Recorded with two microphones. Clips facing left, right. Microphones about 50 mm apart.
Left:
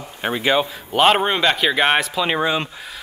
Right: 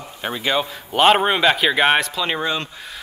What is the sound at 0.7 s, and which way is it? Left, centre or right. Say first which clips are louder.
Speech: right 1 dB; centre.